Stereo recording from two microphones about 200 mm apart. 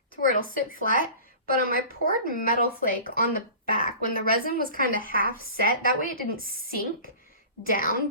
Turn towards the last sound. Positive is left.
turn(degrees=45)  # may be behind; listen again after turning